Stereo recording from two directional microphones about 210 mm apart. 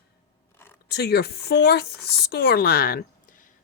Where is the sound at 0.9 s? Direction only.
50° left (ahead or behind).